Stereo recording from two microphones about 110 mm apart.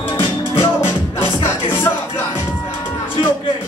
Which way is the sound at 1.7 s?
20° left (ahead or behind).